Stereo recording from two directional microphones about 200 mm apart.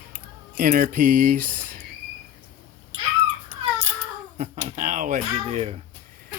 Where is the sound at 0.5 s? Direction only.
45° right (ahead or behind).